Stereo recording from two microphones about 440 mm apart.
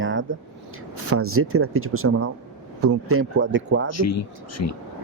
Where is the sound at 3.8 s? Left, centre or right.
Left.